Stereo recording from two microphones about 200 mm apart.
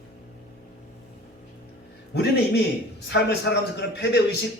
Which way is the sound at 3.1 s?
60° left (ahead or behind).